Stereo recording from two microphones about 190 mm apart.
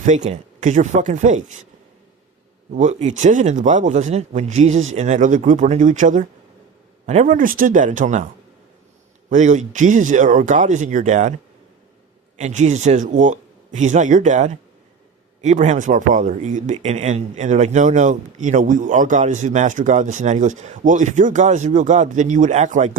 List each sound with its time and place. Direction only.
0.0 s speech: 40° right (ahead or behind)
2.7 s speech: 40° right (ahead or behind)
9.3 s speech: 40° right (ahead or behind)
12.4 s speech: 40° right (ahead or behind)